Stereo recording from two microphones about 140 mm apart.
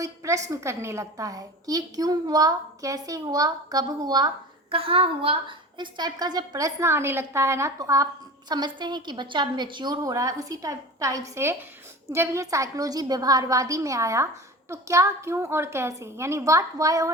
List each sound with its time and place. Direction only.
0.0 s a woman's voice: 25° right (ahead or behind)
4.7 s a woman's voice: 40° right (ahead or behind); by 17.1 s 25° right (ahead or behind)